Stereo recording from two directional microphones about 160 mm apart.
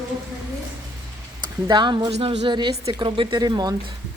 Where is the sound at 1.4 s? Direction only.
30° right (ahead or behind).